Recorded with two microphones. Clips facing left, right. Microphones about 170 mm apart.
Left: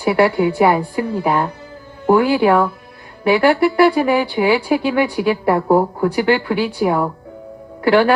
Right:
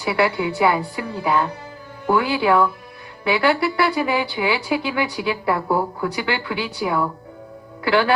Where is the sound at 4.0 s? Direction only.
35° left (ahead or behind).